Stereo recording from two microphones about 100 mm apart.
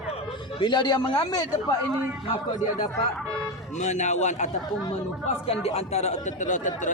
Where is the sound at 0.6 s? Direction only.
50° left (ahead or behind).